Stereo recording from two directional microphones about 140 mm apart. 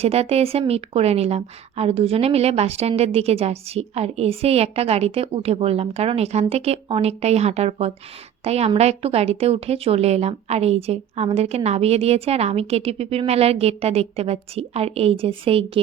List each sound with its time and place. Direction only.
0.0 s a woman's voice: 45° right (ahead or behind)